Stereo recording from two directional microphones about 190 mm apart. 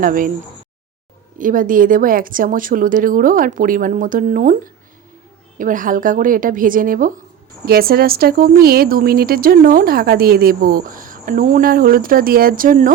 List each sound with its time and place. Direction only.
0.0 s speech: 45° right (ahead or behind)
1.4 s speech: 45° right (ahead or behind)